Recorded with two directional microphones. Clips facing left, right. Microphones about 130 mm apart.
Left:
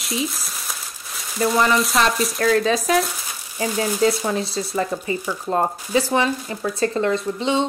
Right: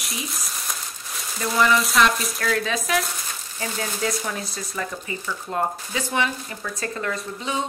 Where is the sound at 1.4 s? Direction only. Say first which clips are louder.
Left 2 dB; 35° left (ahead or behind).